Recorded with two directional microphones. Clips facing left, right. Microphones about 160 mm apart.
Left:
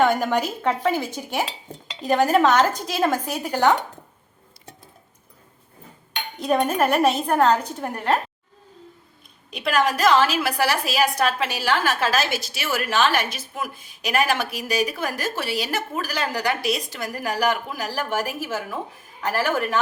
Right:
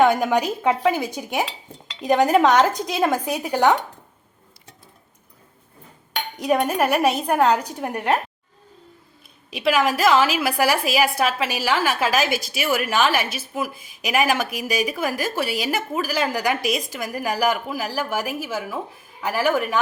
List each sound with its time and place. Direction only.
0.3 s a woman's voice: 10° right (ahead or behind)
6.4 s a woman's voice: 10° right (ahead or behind)
9.5 s a woman's voice: 5° right (ahead or behind)